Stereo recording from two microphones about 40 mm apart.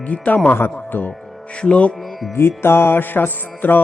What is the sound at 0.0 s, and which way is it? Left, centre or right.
Speech, left.